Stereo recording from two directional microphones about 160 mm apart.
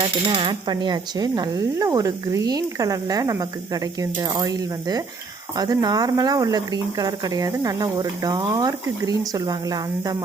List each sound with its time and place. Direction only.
0.0 s speech: 35° right (ahead or behind)